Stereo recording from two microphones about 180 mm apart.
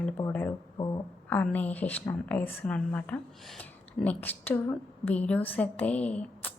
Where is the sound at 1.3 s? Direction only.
10° left (ahead or behind).